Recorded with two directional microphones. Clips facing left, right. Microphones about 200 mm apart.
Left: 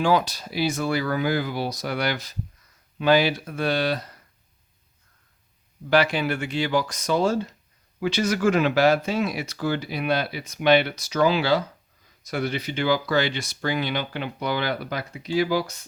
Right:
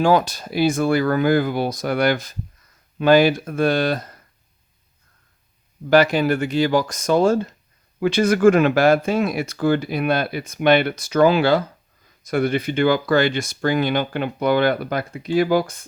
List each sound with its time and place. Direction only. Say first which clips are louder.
0.0 s speech: right 4 dB; 45° right (ahead or behind)
5.9 s speech: right 6 dB; 45° right (ahead or behind)